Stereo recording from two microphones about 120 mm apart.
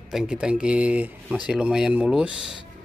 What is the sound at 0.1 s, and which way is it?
Speech, 5° right (ahead or behind).